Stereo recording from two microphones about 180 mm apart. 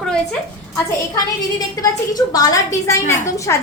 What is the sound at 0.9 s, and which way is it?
A woman's voice, 20° left (ahead or behind).